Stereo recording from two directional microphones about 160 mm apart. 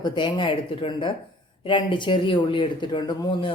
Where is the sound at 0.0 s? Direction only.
30° left (ahead or behind).